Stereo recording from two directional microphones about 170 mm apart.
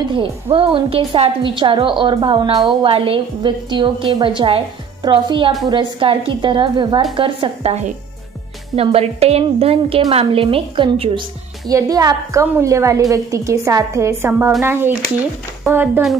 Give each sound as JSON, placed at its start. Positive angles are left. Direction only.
{"t": 0.1, "sound": "a woman's voice", "side_deg": -30}